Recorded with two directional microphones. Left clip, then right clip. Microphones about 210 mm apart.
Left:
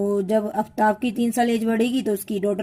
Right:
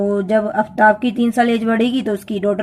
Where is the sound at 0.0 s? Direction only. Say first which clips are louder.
Right 5 dB; 35° left (ahead or behind).